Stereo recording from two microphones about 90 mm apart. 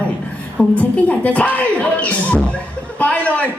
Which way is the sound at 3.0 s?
15° left (ahead or behind).